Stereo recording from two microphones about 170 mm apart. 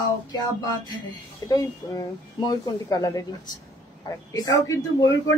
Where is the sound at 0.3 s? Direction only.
25° left (ahead or behind).